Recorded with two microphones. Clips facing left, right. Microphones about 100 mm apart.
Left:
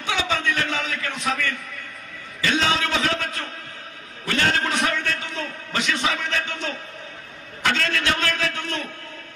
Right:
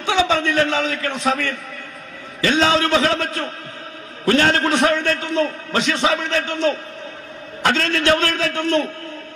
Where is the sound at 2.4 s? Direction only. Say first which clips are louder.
Right 6 dB; 35° right (ahead or behind).